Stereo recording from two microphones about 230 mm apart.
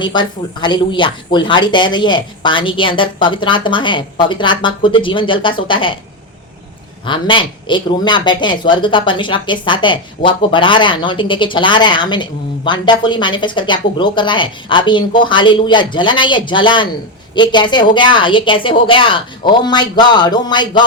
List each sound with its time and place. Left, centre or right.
0.0 s speech: centre
7.0 s speech: left